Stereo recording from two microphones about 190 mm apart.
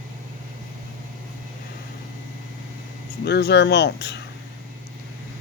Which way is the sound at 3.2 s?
60° left (ahead or behind).